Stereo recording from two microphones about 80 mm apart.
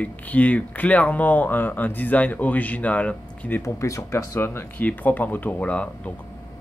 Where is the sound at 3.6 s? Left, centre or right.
Left; by 5.9 s centre.